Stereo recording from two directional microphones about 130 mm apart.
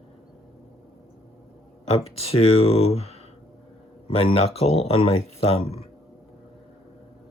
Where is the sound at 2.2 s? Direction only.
50° left (ahead or behind).